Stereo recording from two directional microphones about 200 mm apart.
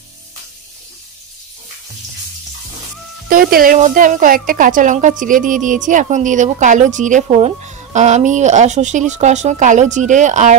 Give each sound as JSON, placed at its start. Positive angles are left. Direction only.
{"t": 3.3, "sound": "speech", "side_deg": -45}